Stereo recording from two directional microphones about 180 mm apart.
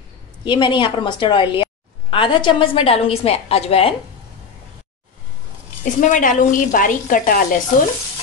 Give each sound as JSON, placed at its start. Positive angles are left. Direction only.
{"t": 0.5, "sound": "a woman's voice", "side_deg": 25}
{"t": 5.9, "sound": "a woman's voice", "side_deg": 45}